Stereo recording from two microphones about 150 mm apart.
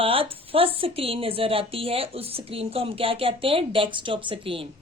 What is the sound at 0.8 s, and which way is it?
Speech, 40° right (ahead or behind).